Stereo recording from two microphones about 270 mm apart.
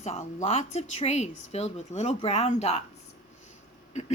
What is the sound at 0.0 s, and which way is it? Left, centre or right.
Speech, left.